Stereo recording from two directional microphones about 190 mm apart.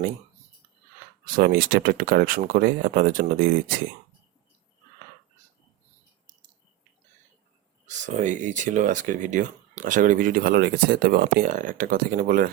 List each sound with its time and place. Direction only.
1.4 s speech: 50° right (ahead or behind)
7.9 s speech: 40° right (ahead or behind)